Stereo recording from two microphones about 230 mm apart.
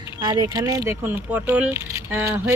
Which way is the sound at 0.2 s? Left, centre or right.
Centre.